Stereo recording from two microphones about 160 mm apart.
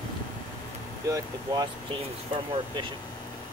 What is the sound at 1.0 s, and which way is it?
Speech, 25° right (ahead or behind).